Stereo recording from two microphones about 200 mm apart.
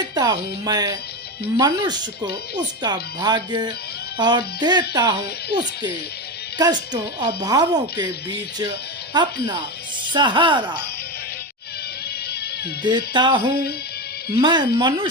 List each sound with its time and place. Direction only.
0.1 s speech: 20° right (ahead or behind)
6.6 s speech: 20° right (ahead or behind)
9.1 s speech: 20° right (ahead or behind)
12.8 s speech: 25° right (ahead or behind)